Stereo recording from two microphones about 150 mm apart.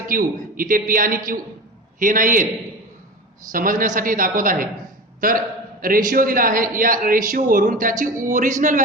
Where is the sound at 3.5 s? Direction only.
65° right (ahead or behind).